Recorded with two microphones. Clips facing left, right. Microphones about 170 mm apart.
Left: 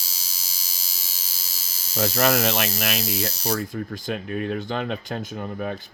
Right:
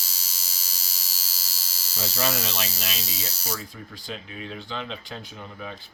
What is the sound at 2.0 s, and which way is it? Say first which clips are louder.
Hum: left 8 dB; 65° left (ahead or behind).